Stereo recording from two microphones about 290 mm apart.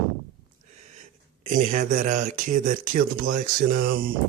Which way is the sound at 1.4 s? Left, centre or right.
Right.